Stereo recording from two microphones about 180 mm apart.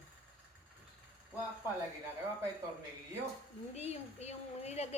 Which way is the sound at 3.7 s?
35° left (ahead or behind).